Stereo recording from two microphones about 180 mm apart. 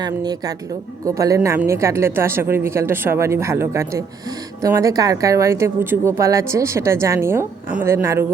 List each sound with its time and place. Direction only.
0.0 s speech: 20° right (ahead or behind)